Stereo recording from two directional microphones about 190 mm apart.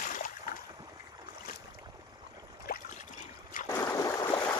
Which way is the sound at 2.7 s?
50° left (ahead or behind).